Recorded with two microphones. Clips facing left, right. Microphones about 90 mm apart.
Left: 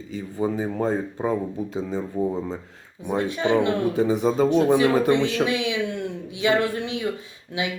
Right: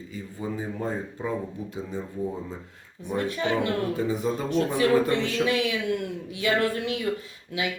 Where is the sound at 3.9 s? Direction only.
75° left (ahead or behind).